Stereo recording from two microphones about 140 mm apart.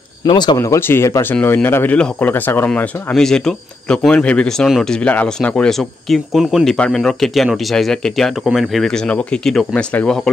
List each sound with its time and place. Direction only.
0.2 s speech: 30° left (ahead or behind)
0.6 s speech: 20° left (ahead or behind)